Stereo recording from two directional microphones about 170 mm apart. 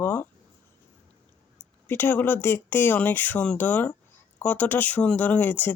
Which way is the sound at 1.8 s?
10° left (ahead or behind).